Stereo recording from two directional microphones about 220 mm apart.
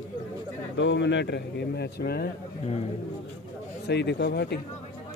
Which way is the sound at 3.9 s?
50° left (ahead or behind).